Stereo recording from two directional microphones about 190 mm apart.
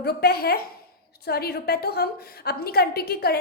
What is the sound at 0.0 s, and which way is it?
A woman's voice, 55° left (ahead or behind).